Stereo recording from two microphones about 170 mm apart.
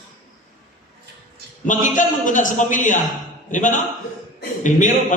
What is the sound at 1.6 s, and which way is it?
A man's voice, 50° left (ahead or behind).